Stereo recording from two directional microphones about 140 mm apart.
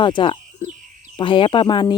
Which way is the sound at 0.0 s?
35° left (ahead or behind).